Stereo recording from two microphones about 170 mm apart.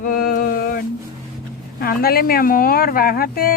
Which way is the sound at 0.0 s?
55° left (ahead or behind).